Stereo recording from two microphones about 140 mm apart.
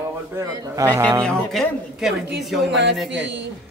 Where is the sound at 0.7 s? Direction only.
20° right (ahead or behind).